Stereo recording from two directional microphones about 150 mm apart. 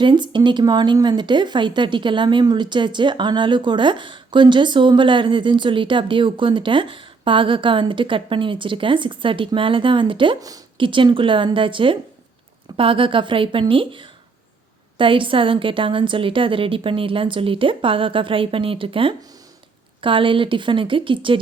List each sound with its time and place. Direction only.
0.0 s speech: 30° right (ahead or behind)